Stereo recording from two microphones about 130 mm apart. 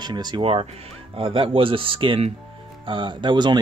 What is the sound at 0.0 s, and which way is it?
Speech, 35° right (ahead or behind).